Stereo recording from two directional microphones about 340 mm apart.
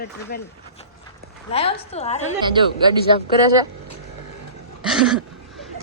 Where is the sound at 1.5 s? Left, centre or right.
Centre.